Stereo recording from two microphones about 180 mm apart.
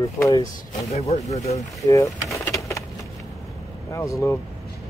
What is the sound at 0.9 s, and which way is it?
Speech, 35° left (ahead or behind).